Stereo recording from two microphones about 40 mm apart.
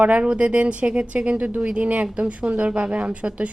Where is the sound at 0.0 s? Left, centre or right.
Right.